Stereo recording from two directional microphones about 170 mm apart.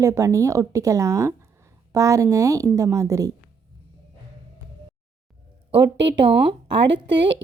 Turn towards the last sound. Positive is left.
turn(degrees=-90)